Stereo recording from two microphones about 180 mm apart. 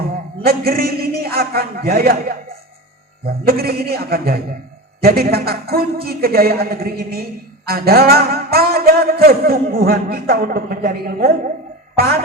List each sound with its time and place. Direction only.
0.4 s a man's voice: 60° right (ahead or behind)